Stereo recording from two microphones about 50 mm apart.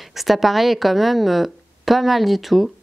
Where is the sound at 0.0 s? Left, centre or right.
Centre.